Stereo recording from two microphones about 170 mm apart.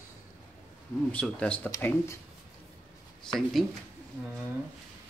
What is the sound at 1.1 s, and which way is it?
Speech, 5° left (ahead or behind).